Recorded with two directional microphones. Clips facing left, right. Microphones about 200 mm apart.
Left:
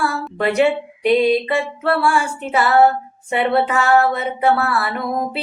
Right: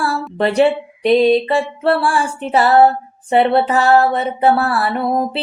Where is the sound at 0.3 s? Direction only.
30° right (ahead or behind).